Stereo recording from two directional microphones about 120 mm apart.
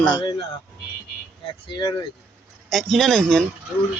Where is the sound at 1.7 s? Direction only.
35° left (ahead or behind).